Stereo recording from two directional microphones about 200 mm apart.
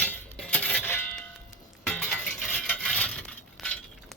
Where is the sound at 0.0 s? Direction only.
10° left (ahead or behind).